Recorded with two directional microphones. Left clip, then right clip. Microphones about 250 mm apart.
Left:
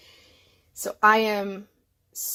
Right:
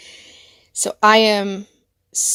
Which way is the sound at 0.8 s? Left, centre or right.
Right.